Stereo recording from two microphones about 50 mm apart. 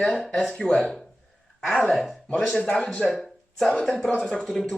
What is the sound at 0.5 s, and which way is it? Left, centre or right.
Speech, left.